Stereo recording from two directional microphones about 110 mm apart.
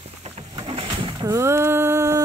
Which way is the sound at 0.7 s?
50° right (ahead or behind).